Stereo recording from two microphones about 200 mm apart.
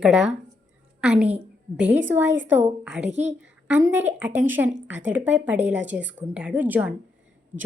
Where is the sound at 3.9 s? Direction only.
10° right (ahead or behind).